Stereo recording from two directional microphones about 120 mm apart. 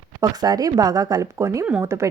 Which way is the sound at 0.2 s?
30° right (ahead or behind).